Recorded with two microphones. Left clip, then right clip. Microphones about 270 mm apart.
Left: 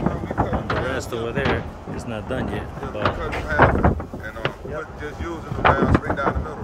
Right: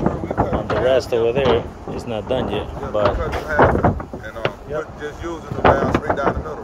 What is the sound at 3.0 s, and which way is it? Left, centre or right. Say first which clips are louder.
Speech: right 5 dB; right.